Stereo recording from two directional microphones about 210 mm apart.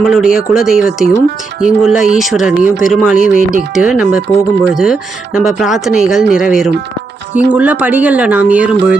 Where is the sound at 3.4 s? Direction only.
40° right (ahead or behind).